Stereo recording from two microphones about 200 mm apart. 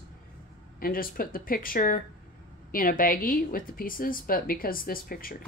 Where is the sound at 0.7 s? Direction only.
45° left (ahead or behind).